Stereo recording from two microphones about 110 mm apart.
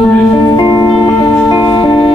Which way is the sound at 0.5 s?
40° left (ahead or behind).